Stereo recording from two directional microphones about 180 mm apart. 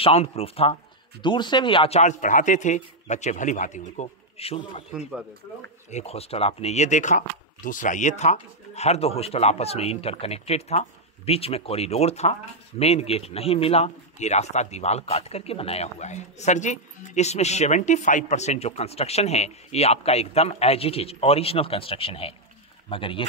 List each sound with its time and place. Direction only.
0.0 s speech: 35° left (ahead or behind)
5.9 s speech: 35° left (ahead or behind)